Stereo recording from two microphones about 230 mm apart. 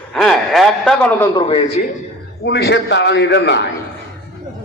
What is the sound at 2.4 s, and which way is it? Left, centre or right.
A man's voice, left.